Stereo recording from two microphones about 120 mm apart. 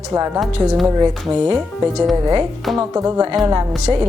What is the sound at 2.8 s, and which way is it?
A woman's voice, 25° right (ahead or behind).